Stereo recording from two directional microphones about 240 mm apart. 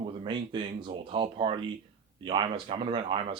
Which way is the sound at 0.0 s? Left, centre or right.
Centre.